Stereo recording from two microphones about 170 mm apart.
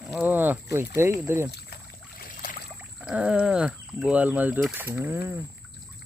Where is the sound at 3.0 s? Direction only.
5° right (ahead or behind).